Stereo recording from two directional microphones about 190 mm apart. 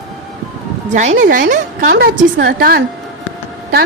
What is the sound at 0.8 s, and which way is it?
A woman's voice, 40° right (ahead or behind).